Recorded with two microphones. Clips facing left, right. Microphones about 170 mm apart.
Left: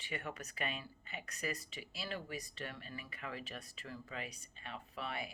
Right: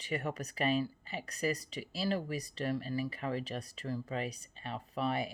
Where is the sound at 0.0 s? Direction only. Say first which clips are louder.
Right 8 dB; 40° right (ahead or behind).